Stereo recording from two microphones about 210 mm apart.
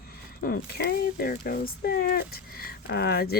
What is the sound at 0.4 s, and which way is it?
Speech, 45° left (ahead or behind).